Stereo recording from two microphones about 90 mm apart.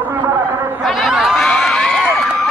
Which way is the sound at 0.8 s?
Centre (ahead or behind).